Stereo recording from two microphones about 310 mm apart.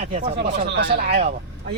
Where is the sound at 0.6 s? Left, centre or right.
Right.